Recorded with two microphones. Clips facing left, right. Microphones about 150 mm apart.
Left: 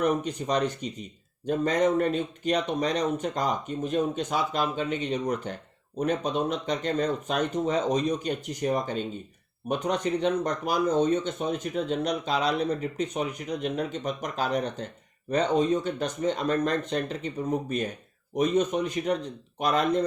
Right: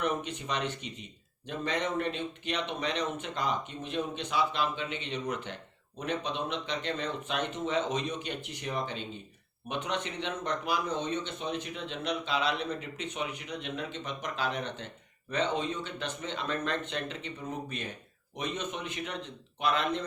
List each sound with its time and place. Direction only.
0.0 s speech: 40° left (ahead or behind)